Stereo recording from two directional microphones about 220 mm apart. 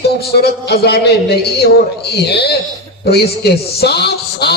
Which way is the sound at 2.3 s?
50° left (ahead or behind).